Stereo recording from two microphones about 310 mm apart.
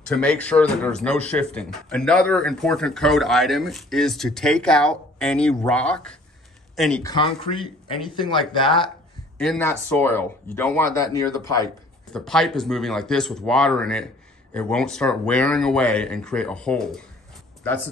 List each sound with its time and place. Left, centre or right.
0.1 s speech: centre
9.4 s speech: centre